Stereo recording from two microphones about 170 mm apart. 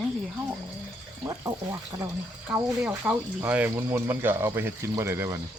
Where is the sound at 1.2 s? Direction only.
20° right (ahead or behind).